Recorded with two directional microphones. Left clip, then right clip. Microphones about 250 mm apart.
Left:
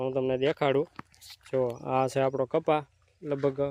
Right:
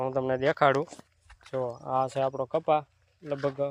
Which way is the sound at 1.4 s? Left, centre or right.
Left.